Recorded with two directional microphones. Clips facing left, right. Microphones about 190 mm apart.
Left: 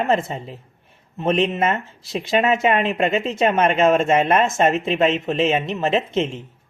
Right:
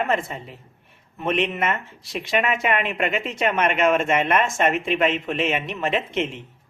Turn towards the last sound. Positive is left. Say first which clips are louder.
# left 4 dB
turn(degrees=25)  # may be behind; listen again after turning